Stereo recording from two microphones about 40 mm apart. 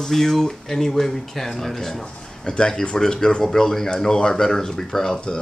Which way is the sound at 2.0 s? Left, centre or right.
Left.